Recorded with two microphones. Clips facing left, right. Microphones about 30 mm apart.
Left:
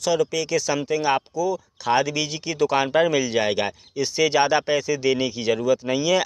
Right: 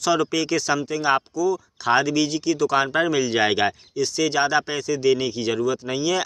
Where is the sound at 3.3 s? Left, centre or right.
Centre.